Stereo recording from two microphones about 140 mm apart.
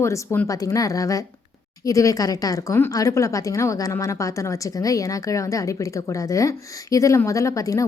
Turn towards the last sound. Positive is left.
turn(degrees=25)  # may be behind; listen again after turning